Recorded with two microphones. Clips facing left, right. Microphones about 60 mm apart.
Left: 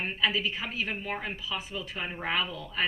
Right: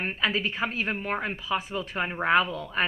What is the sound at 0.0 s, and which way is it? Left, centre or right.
A woman's voice, right.